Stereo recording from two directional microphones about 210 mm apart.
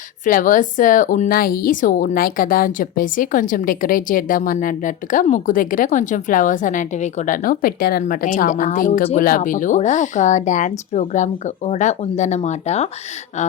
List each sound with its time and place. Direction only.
0.3 s a woman's voice: 40° left (ahead or behind)